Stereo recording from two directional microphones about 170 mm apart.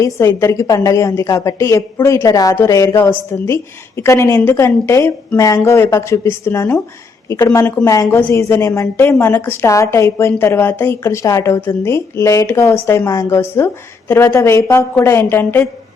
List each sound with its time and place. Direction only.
0.0 s a woman's voice: 15° left (ahead or behind)